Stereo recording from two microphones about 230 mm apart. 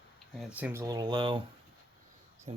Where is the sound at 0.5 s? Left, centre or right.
Centre.